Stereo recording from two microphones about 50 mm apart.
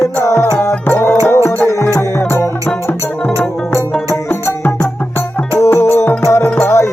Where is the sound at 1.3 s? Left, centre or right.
Left.